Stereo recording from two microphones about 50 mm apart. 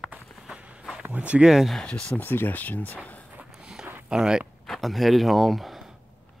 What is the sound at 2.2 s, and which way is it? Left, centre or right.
Speech, left.